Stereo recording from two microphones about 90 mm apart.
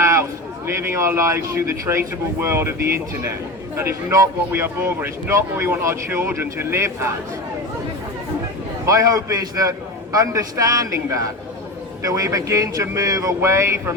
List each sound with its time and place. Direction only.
0.0 s a sound: 35° right (ahead or behind)
0.8 s a man's voice: 30° right (ahead or behind)
3.8 s speech: 30° right (ahead or behind)
8.9 s a man's voice: 40° right (ahead or behind)